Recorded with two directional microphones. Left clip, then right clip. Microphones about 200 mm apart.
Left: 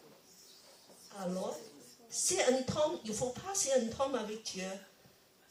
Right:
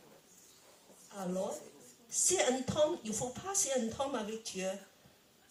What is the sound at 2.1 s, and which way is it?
Speech, 35° right (ahead or behind).